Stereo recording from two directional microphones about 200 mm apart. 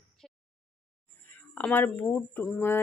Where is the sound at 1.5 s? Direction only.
10° left (ahead or behind).